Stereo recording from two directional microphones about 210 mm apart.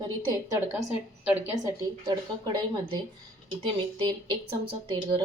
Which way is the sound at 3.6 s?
20° right (ahead or behind).